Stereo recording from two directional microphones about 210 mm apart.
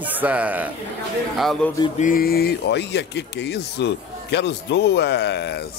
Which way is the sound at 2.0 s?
45° left (ahead or behind).